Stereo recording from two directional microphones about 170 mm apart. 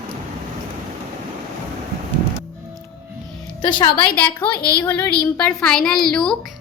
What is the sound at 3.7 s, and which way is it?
Speech, 25° left (ahead or behind).